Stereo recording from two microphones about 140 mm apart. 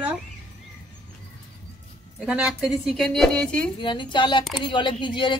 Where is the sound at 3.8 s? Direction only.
35° left (ahead or behind).